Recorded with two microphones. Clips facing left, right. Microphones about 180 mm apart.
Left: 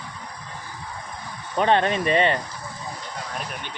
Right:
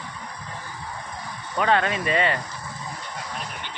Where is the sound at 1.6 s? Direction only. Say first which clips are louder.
Left 2 dB; 25° left (ahead or behind).